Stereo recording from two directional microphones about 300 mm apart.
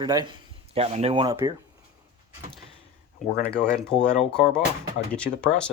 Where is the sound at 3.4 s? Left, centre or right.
Centre.